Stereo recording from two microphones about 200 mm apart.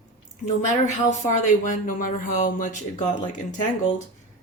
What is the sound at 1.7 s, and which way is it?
Speech, 45° left (ahead or behind).